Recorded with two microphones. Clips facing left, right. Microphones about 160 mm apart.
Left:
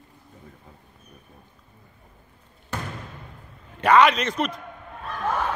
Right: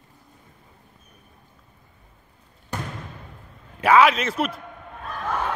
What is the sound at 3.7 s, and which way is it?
Speech, 5° right (ahead or behind).